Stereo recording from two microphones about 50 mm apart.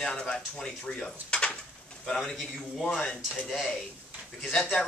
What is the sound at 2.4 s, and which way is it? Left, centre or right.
Speech, centre.